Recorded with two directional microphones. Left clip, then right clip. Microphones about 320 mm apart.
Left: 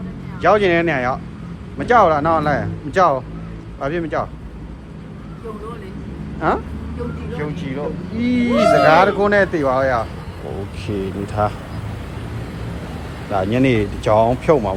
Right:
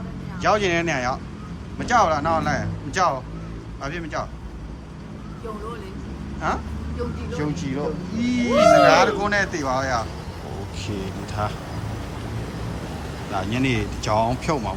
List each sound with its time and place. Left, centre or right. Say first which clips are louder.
0.4 s speech: left 6 dB; centre
7.3 s speech: left 1 dB; centre
8.3 s speech: left 1 dB; centre
10.8 s speech: left 8 dB; right
13.3 s speech: left 7 dB; centre